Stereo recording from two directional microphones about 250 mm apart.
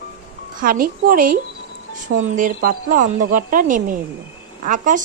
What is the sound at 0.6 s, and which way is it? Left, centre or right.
A woman's voice, right.